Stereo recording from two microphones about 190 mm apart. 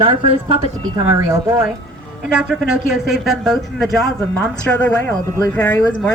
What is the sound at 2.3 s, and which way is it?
A woman's voice, 5° right (ahead or behind).